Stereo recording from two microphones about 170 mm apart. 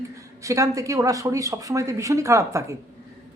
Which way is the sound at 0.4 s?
20° right (ahead or behind).